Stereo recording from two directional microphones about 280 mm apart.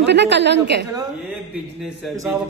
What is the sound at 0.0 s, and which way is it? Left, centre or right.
Speech, right.